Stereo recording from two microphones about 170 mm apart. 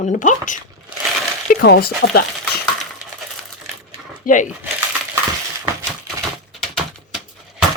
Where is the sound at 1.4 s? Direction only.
60° left (ahead or behind).